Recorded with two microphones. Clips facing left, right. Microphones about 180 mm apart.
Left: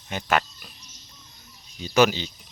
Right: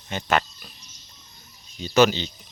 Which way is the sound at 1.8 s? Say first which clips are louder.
Right 1 dB; 10° left (ahead or behind).